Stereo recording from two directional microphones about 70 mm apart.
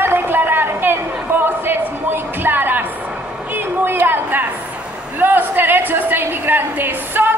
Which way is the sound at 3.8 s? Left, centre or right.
Right.